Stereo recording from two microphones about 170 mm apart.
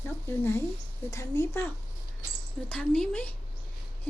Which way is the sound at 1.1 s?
15° left (ahead or behind).